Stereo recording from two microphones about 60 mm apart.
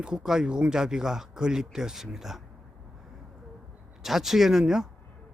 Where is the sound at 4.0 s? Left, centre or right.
Centre.